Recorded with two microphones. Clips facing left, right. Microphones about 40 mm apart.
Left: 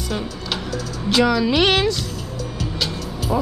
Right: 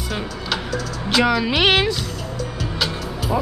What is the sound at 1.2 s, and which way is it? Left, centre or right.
Speech, centre.